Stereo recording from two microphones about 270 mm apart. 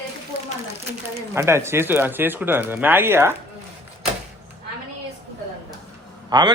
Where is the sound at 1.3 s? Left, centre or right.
Centre.